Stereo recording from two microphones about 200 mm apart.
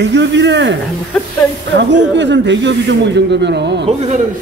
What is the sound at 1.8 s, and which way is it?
Speech, 60° right (ahead or behind).